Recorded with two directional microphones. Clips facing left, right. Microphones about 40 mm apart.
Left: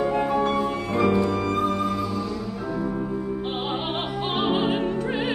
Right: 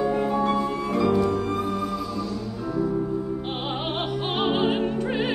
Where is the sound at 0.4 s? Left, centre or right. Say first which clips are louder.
Even; left.